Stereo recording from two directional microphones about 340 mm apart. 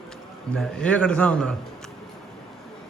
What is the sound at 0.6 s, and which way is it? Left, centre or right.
Speech, centre.